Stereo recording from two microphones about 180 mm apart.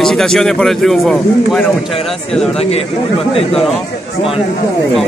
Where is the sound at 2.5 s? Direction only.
35° left (ahead or behind).